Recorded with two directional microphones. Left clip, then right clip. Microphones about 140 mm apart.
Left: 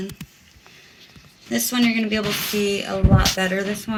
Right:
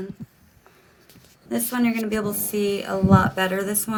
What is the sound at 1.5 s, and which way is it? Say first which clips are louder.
Speech: left 3 dB; centre (ahead or behind).